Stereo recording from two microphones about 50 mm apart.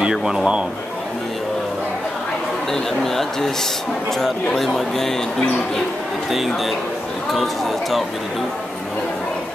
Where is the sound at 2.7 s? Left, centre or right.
Centre.